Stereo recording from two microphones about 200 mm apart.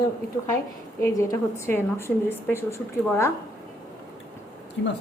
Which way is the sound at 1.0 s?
15° left (ahead or behind).